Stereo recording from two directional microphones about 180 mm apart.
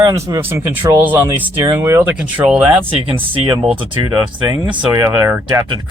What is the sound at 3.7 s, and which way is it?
Speech, 30° right (ahead or behind).